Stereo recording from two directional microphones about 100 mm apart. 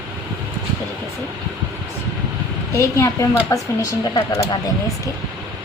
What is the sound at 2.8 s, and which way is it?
A woman's voice, 30° left (ahead or behind).